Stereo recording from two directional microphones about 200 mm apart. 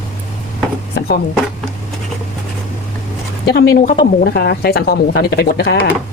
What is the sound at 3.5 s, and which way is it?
Speech, 55° left (ahead or behind).